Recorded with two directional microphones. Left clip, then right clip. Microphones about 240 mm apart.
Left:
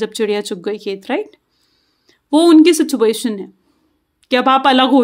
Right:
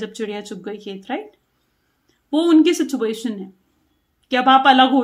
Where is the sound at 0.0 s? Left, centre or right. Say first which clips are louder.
Left 10 dB; left.